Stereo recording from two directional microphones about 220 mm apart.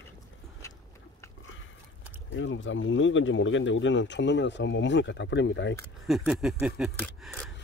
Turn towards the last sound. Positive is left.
turn(degrees=0)  # may be behind; listen again after turning